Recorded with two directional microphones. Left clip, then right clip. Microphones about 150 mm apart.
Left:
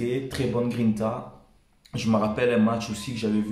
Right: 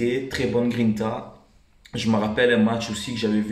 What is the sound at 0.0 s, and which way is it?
Speech, 15° left (ahead or behind).